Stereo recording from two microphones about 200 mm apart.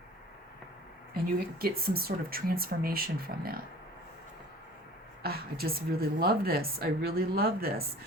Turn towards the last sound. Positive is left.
turn(degrees=-50)  # may be behind; listen again after turning